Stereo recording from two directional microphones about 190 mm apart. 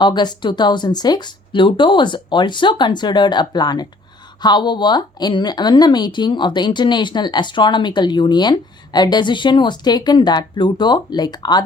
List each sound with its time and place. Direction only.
0.0 s speech: 25° left (ahead or behind)